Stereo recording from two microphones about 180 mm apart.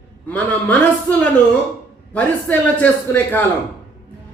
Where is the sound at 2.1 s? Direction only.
10° left (ahead or behind).